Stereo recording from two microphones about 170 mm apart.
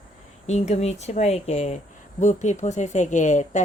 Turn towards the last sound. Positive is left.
turn(degrees=45)  # may be behind; listen again after turning